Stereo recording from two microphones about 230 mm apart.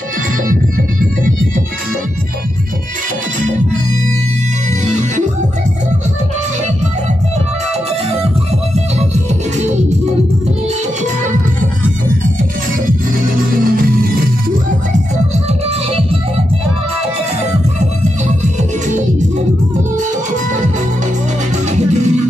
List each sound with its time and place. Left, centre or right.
4.8 s music: right
9.6 s music: right
12.8 s music: right
18.4 s music: right
21.6 s music: right